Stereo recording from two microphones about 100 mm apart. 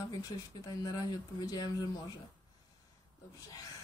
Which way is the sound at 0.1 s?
40° left (ahead or behind).